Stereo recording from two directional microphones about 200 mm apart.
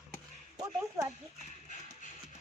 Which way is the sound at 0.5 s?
15° right (ahead or behind).